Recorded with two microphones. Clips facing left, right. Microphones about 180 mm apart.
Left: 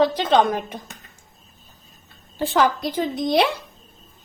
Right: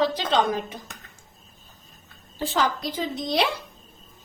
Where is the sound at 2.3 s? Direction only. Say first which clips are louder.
Left 5 dB; 60° left (ahead or behind).